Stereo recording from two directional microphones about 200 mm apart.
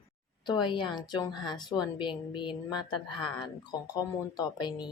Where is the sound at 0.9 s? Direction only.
20° left (ahead or behind).